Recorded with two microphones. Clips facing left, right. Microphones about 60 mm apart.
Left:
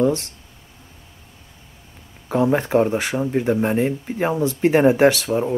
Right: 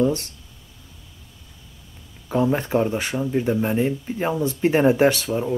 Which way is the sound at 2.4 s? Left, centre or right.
Left.